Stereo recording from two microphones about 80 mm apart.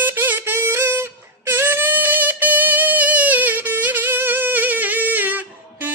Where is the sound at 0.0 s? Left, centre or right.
Right.